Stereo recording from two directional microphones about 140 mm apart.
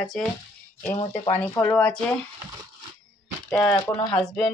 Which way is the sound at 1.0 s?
40° left (ahead or behind).